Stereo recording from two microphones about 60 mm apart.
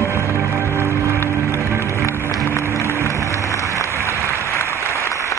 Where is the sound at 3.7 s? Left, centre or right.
Left.